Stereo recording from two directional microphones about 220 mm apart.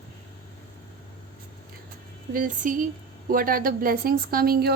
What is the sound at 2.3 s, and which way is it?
A woman's voice, 35° right (ahead or behind).